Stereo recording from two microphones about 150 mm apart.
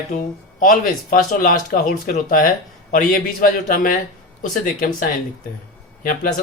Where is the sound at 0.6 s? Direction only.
60° left (ahead or behind).